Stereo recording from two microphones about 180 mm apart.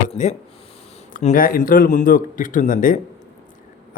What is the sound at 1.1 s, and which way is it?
A man's voice, 50° left (ahead or behind).